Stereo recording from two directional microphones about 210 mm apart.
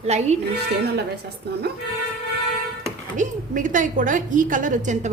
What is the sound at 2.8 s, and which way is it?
A woman's voice, 40° right (ahead or behind).